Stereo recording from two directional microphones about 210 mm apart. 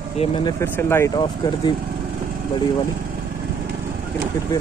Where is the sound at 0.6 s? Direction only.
10° left (ahead or behind).